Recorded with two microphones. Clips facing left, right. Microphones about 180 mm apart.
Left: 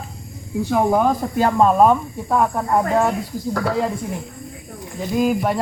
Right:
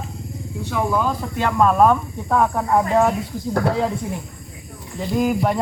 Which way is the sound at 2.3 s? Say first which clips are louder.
Even; centre (ahead or behind).